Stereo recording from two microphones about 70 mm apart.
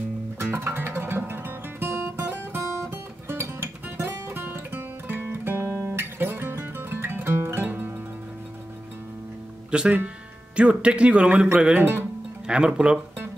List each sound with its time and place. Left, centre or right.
0.4 s guitar: right
9.7 s speech: centre